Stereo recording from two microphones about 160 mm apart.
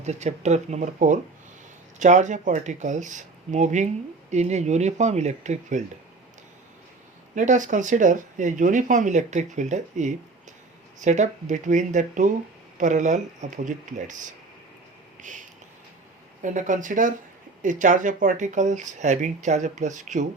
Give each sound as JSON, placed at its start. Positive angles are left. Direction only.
{"t": 0.0, "sound": "speech", "side_deg": -45}
{"t": 7.3, "sound": "speech", "side_deg": -50}
{"t": 15.2, "sound": "a sound", "side_deg": -50}
{"t": 16.4, "sound": "speech", "side_deg": -50}